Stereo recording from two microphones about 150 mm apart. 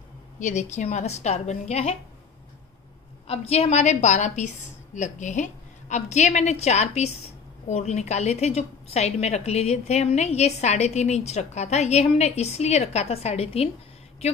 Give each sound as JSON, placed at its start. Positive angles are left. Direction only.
{"t": 0.4, "sound": "a woman's voice", "side_deg": 50}
{"t": 3.3, "sound": "a woman's voice", "side_deg": 45}